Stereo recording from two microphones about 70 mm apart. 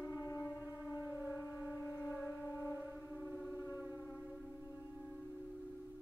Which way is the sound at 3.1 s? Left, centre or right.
Centre.